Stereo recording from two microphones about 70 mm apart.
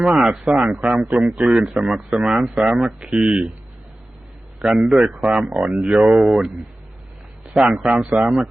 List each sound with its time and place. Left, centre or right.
0.0 s speech: centre
4.6 s speech: centre
7.5 s a man's voice: centre